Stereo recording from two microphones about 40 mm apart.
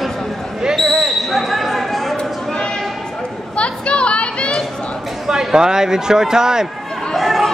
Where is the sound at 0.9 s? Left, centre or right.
Centre.